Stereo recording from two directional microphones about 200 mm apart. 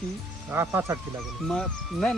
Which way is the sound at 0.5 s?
10° right (ahead or behind).